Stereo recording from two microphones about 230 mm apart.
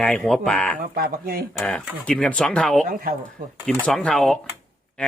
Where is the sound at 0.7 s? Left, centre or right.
Right.